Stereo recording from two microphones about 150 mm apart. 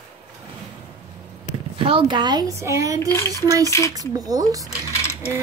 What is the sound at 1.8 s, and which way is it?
Speech, 35° right (ahead or behind).